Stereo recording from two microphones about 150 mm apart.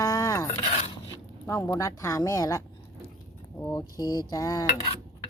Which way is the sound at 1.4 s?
20° left (ahead or behind).